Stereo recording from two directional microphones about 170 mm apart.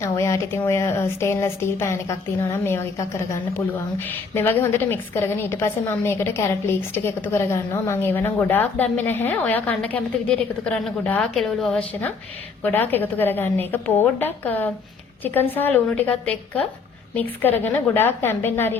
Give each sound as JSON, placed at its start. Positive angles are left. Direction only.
{"t": 0.0, "sound": "a woman's voice", "side_deg": 15}